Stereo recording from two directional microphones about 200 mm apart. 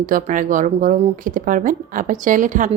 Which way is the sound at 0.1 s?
40° right (ahead or behind).